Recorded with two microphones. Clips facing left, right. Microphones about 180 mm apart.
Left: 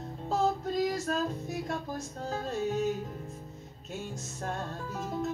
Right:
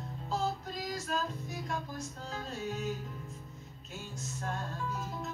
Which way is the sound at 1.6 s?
45° left (ahead or behind).